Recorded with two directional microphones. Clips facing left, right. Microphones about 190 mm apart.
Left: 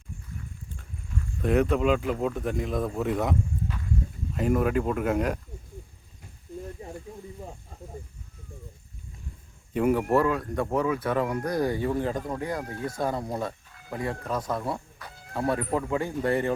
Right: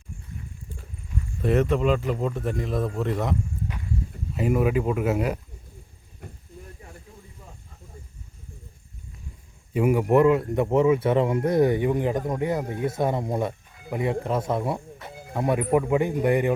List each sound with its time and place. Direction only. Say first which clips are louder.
1.4 s speech: right 1 dB; centre (ahead or behind)
4.4 s speech: right 2 dB; 10° right (ahead or behind)
6.2 s a sound: right 9 dB; 60° right (ahead or behind)
6.8 s snake: left 7 dB; 25° left (ahead or behind)
9.7 s speech: right 3 dB; 10° right (ahead or behind)